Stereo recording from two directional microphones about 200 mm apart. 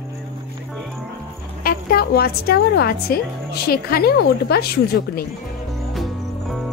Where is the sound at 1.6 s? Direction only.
50° left (ahead or behind).